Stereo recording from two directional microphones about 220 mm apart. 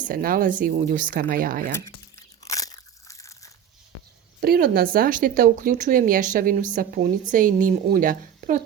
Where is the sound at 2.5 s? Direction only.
15° left (ahead or behind).